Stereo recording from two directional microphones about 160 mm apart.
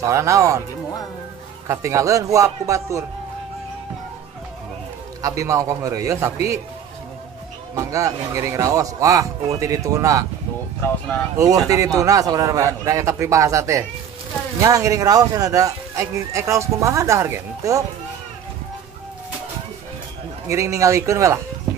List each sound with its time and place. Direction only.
0.0 s speech: 20° right (ahead or behind)
1.7 s speech: 20° right (ahead or behind)
5.2 s speech: 20° right (ahead or behind)
7.7 s speech: 20° right (ahead or behind)
11.5 s speech: 20° right (ahead or behind)
20.4 s speech: 20° right (ahead or behind)